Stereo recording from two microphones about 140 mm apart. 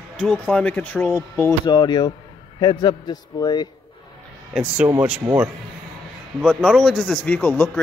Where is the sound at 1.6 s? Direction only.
30° left (ahead or behind).